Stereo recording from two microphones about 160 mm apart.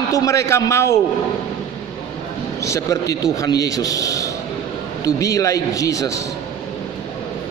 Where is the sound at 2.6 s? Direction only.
20° left (ahead or behind).